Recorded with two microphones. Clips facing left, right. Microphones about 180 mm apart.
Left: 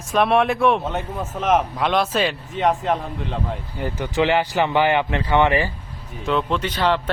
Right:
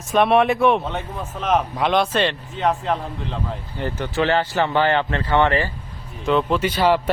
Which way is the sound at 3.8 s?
15° left (ahead or behind).